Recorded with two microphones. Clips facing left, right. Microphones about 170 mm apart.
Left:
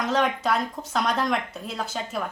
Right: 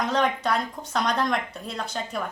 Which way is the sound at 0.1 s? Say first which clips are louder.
Left 3 dB; centre (ahead or behind).